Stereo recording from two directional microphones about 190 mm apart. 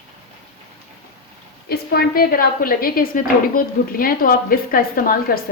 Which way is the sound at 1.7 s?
55° left (ahead or behind).